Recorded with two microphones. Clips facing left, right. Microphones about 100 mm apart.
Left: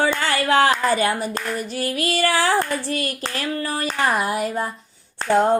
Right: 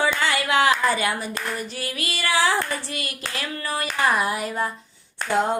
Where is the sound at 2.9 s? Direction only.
40° left (ahead or behind).